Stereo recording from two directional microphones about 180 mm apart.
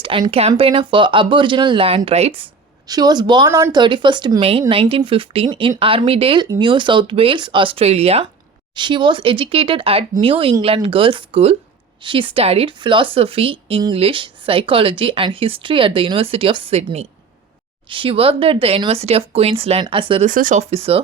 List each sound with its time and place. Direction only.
0.0 s speech: 30° right (ahead or behind)
20.2 s speech: 45° right (ahead or behind)